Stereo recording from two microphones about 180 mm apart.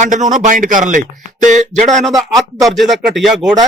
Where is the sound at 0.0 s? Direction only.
45° right (ahead or behind).